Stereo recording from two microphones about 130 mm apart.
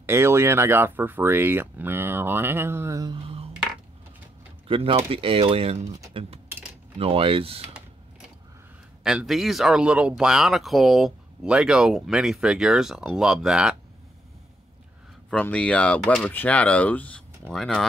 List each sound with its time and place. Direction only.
0.0 s speech: 20° right (ahead or behind)
3.1 s a sound: 45° right (ahead or behind)
4.6 s speech: 45° right (ahead or behind)
9.0 s speech: 5° right (ahead or behind)
15.2 s speech: 10° left (ahead or behind)